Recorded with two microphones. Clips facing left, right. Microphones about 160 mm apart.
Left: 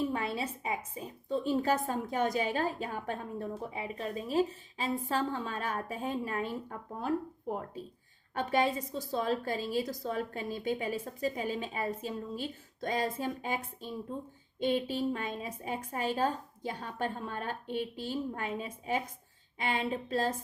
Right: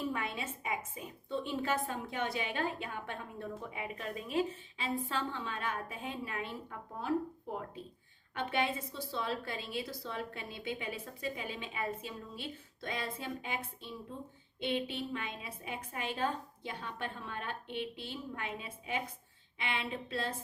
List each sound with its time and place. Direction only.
0.1 s a sound: 35° left (ahead or behind)
0.9 s a woman's voice: 35° left (ahead or behind)
8.4 s a woman's voice: 40° left (ahead or behind)